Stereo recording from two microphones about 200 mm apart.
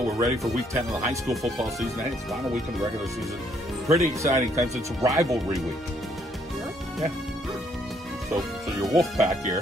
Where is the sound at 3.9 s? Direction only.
15° right (ahead or behind).